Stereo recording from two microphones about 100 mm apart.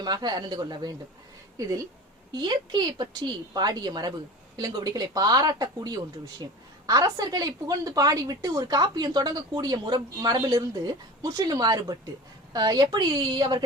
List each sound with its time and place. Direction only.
0.0 s a woman's voice: 45° right (ahead or behind)
2.3 s a woman's voice: 45° right (ahead or behind)